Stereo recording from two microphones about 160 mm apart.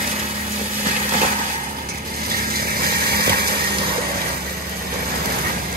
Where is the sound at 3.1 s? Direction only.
75° right (ahead or behind).